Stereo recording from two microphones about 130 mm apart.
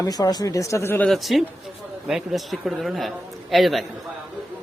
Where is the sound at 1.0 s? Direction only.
Centre (ahead or behind).